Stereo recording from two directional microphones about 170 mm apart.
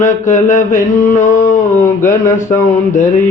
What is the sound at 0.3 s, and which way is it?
Mantra, 45° left (ahead or behind).